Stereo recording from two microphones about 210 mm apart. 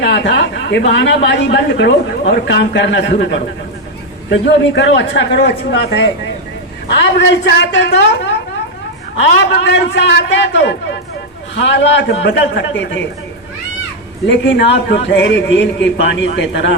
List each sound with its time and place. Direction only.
0.0 s a man's voice: 55° left (ahead or behind)
9.6 s a man's voice: 55° left (ahead or behind)
14.3 s a man's voice: 55° left (ahead or behind)